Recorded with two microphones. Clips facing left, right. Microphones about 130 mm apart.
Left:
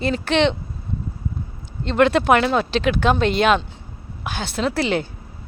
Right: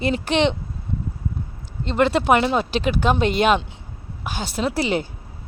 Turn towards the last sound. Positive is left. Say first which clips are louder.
# left 1 dB
turn(degrees=-10)  # may be behind; listen again after turning